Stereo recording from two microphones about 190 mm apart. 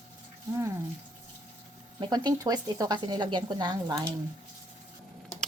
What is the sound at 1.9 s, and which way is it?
Speech, 20° right (ahead or behind).